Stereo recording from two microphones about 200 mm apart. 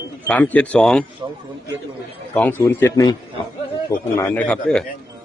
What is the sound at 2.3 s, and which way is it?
A man's voice, 10° left (ahead or behind).